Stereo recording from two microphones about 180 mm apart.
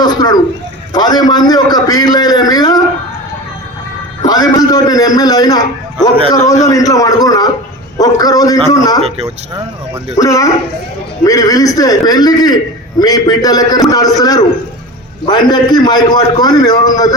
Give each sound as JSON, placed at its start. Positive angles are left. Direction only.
{"t": 0.0, "sound": "a sound", "side_deg": 20}
{"t": 0.9, "sound": "a man's voice", "side_deg": 20}
{"t": 4.3, "sound": "a man's voice", "side_deg": 20}
{"t": 10.2, "sound": "a man's voice", "side_deg": 15}